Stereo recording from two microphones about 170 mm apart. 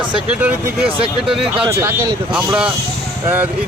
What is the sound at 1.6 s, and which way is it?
Speech, 15° right (ahead or behind).